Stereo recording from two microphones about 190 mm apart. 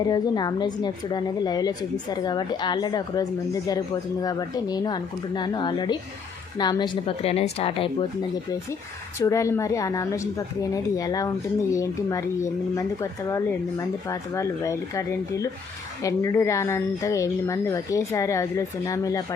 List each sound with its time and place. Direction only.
0.1 s speech: 20° left (ahead or behind)
9.1 s speech: 15° left (ahead or behind)